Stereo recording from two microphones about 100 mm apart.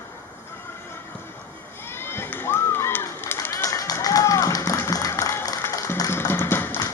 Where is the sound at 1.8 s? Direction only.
25° left (ahead or behind).